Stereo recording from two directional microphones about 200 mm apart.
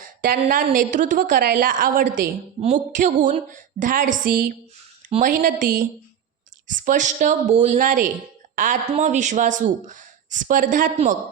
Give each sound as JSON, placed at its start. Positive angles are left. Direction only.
{"t": 0.2, "sound": "a woman's voice", "side_deg": -45}